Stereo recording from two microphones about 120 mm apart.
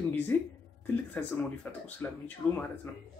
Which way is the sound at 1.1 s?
15° left (ahead or behind).